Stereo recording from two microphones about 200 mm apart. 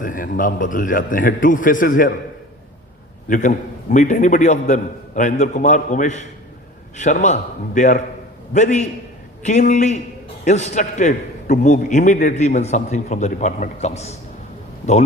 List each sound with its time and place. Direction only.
0.0 s a man's voice: 40° left (ahead or behind)
3.2 s a man's voice: 40° left (ahead or behind)